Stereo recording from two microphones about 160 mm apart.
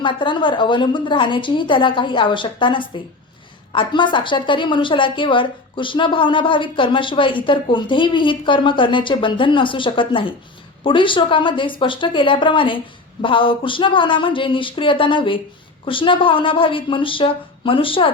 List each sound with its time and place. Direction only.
0.0 s a woman's voice: 30° left (ahead or behind)